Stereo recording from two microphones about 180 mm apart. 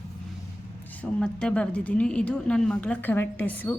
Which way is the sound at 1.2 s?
5° left (ahead or behind).